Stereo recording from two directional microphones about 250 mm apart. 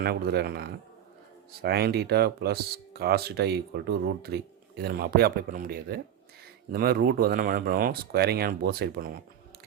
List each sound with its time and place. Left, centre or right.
0.0 s speech: right